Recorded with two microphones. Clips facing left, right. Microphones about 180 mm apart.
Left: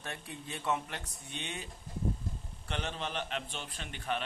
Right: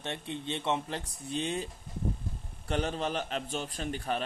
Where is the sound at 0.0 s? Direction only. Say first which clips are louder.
Right 7 dB; 25° right (ahead or behind).